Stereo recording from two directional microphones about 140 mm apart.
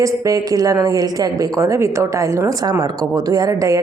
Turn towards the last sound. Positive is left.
turn(degrees=-25)  # may be behind; listen again after turning